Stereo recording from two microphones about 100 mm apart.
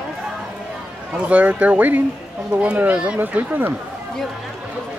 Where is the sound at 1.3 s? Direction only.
15° right (ahead or behind).